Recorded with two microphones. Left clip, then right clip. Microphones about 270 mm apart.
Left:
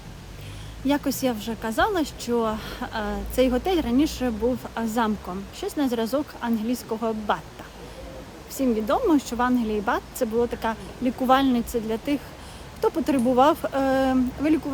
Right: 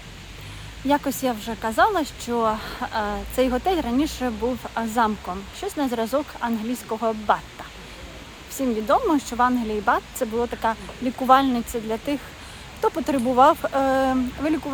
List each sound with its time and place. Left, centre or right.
0.9 s speech: centre
8.5 s speech: centre